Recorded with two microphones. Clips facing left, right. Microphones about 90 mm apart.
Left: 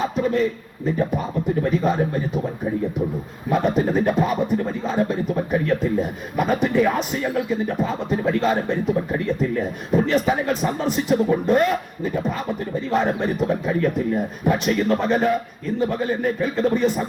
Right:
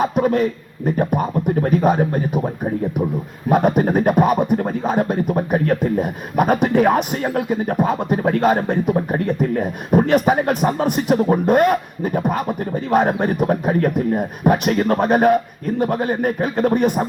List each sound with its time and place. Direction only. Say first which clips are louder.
0.0 s speech: right 4 dB; 55° right (ahead or behind)
3.5 s speech: right 4 dB; 55° right (ahead or behind)